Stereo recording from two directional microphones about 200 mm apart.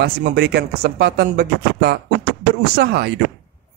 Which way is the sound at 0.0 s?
55° right (ahead or behind).